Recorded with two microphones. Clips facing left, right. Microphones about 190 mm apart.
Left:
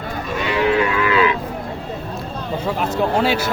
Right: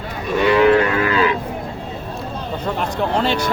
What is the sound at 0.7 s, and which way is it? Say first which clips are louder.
Moo: right 2 dB; 45° right (ahead or behind).